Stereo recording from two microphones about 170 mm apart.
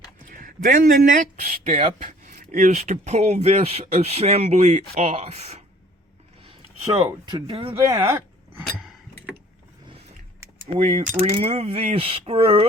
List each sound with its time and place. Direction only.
0.3 s speech: 50° right (ahead or behind)
6.8 s speech: 30° right (ahead or behind)
7.9 s speech: 20° right (ahead or behind)
10.8 s speech: 45° right (ahead or behind)